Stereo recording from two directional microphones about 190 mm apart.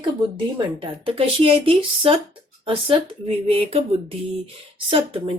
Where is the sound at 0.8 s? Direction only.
30° right (ahead or behind).